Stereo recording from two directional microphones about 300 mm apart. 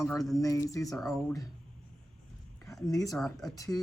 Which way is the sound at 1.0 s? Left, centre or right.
Centre.